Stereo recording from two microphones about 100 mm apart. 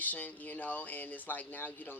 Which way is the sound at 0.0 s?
15° left (ahead or behind).